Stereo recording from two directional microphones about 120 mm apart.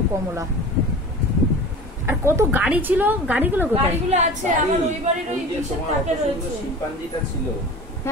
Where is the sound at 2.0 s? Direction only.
20° right (ahead or behind).